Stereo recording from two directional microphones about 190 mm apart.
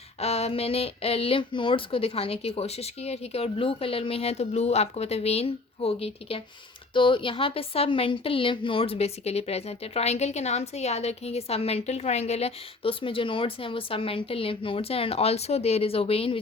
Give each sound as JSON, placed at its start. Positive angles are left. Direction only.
{"t": 0.2, "sound": "a woman's voice", "side_deg": 35}